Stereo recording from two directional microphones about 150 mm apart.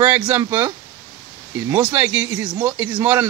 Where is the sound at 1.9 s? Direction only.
15° right (ahead or behind).